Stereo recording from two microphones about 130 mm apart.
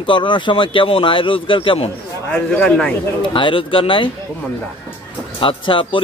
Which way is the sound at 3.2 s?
40° left (ahead or behind).